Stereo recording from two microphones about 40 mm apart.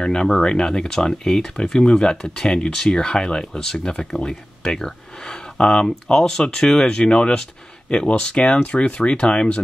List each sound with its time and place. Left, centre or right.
0.0 s speech: centre